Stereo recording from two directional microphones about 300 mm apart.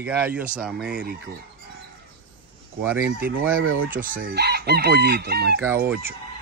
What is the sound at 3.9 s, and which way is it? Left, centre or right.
Chicken, right.